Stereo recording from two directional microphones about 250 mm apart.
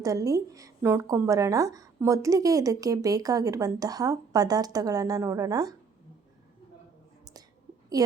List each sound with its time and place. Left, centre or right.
0.0 s speech: centre
8.0 s speech: centre